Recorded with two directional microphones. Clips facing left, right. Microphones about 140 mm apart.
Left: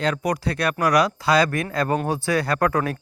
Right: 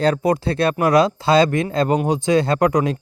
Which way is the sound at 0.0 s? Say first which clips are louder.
Right 6 dB; 30° right (ahead or behind).